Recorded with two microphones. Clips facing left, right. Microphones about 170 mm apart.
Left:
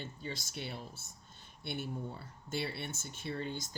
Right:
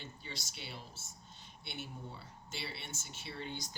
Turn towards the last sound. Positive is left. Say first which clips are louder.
# left 5 dB
turn(degrees=45)  # may be behind; listen again after turning